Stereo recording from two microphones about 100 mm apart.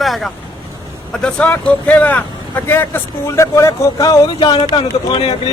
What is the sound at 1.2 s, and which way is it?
Speech, 15° left (ahead or behind).